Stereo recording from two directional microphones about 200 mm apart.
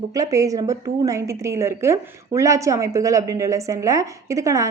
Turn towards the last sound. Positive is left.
turn(degrees=-15)  # may be behind; listen again after turning